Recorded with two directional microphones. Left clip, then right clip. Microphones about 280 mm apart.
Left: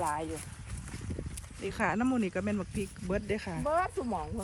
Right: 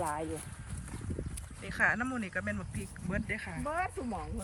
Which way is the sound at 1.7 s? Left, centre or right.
Centre.